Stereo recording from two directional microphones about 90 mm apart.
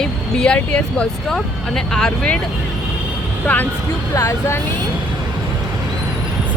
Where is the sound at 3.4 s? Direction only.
15° left (ahead or behind).